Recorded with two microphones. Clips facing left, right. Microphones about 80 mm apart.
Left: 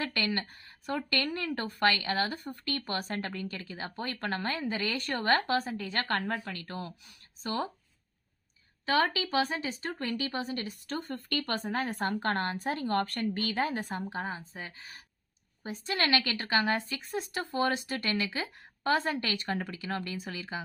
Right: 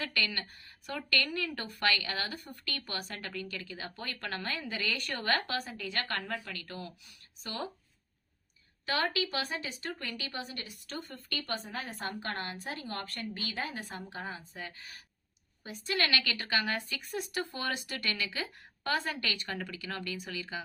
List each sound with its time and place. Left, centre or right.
0.0 s a woman's voice: left
8.9 s a woman's voice: left
11.3 s a woman's voice: left